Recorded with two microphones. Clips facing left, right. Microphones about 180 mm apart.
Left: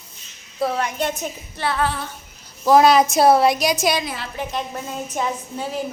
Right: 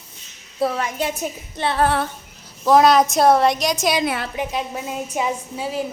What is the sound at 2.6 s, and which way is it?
A woman's voice, centre (ahead or behind).